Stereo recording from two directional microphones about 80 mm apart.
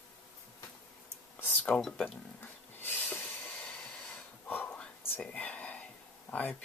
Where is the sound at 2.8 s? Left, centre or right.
Left.